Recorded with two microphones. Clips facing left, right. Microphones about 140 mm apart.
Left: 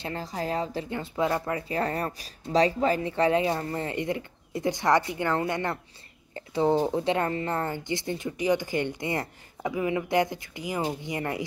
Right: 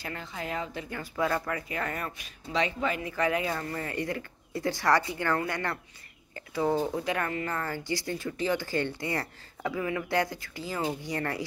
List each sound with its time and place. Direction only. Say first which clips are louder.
0.0 s a woman's voice: left 5 dB; 35° left (ahead or behind)
0.8 s speech: left 3 dB; 20° left (ahead or behind)